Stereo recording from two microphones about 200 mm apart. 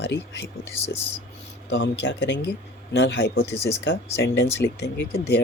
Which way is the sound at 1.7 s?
60° left (ahead or behind).